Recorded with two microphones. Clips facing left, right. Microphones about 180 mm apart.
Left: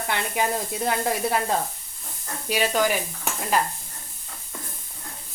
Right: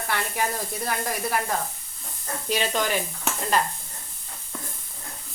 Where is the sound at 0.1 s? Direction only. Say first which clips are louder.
Left 2 dB; 20° left (ahead or behind).